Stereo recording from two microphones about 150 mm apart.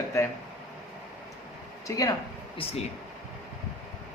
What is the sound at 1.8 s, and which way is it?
Speech, 25° left (ahead or behind).